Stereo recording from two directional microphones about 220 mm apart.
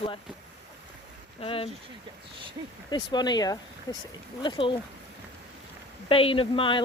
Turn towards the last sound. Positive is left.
turn(degrees=25)  # may be behind; listen again after turning